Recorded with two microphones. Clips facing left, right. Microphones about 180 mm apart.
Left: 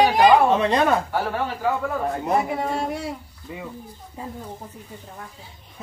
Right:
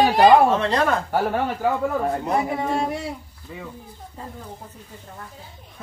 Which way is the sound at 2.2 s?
Centre (ahead or behind).